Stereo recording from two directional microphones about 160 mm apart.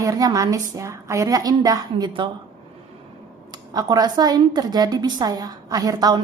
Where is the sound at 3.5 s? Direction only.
25° right (ahead or behind).